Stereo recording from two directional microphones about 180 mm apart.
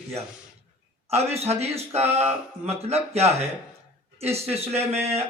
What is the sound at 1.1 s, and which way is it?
A man's voice, 35° right (ahead or behind).